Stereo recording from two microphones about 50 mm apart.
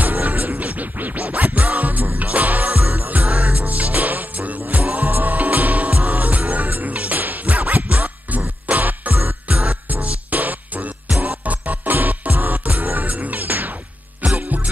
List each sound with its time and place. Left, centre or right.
0.0 s music: right